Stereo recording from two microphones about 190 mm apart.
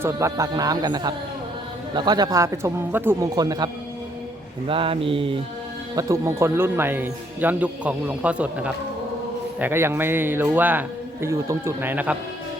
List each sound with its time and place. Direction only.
0.0 s a man's voice: 15° right (ahead or behind)
4.7 s a man's voice: 30° right (ahead or behind)
6.0 s speech: 15° right (ahead or behind)